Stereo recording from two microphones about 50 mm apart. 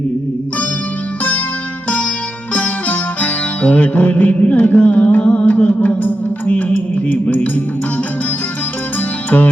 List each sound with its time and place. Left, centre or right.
2.5 s music: left